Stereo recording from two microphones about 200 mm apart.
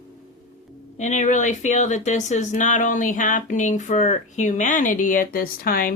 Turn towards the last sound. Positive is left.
turn(degrees=45)  # may be behind; listen again after turning